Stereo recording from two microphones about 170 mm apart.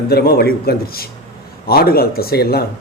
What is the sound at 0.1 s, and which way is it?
A man's voice, 65° left (ahead or behind).